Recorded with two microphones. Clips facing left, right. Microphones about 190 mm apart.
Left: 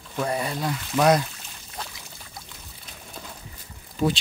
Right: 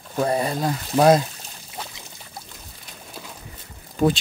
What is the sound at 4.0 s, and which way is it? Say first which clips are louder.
Speech: right 4 dB; 50° right (ahead or behind).